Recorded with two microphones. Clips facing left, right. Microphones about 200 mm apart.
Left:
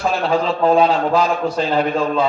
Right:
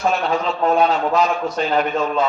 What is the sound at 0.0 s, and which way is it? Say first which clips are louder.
A man's voice: left 1 dB; 30° left (ahead or behind).